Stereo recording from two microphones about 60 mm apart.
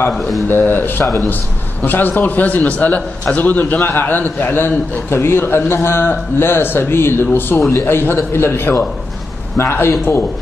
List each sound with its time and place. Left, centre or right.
0.1 s speech: centre
0.5 s a man's voice: left